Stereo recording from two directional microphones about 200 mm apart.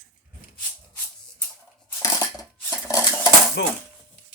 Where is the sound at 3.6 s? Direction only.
60° left (ahead or behind).